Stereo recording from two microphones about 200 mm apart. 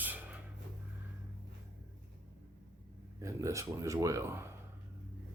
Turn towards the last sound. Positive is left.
turn(degrees=-15)  # may be behind; listen again after turning